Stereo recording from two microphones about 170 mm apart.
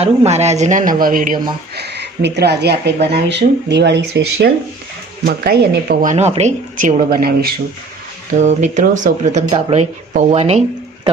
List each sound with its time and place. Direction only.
0.0 s speech: 40° right (ahead or behind); by 1.4 s 55° right (ahead or behind)
1.7 s speech: 75° right (ahead or behind)
3.2 s speech: 90° right
5.2 s speech: 65° right (ahead or behind)
8.4 s speech: 45° right (ahead or behind)
9.5 s speech: 35° right (ahead or behind)